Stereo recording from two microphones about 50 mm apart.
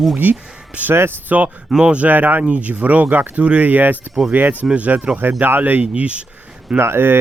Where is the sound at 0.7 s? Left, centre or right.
Right.